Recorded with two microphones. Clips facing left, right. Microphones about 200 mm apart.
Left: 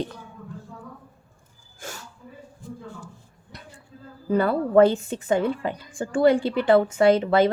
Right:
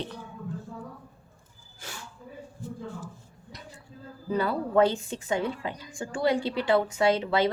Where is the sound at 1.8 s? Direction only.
45° left (ahead or behind).